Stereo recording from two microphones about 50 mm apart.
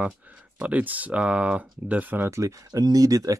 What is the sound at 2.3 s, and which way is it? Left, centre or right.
Speech, right.